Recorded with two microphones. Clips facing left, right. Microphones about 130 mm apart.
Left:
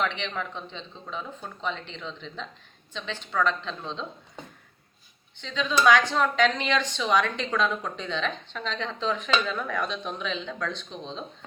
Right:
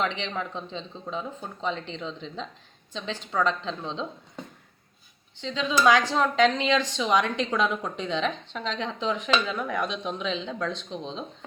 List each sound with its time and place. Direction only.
0.0 s a man's voice: 30° right (ahead or behind)
5.4 s a woman's voice: 25° right (ahead or behind)